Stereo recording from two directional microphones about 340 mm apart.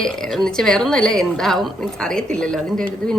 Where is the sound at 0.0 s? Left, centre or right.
Centre.